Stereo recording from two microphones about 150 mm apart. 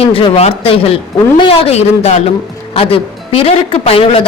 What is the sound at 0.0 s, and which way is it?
A woman's voice, 40° left (ahead or behind).